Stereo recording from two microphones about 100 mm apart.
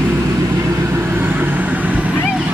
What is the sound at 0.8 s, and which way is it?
Vehicle, 25° right (ahead or behind).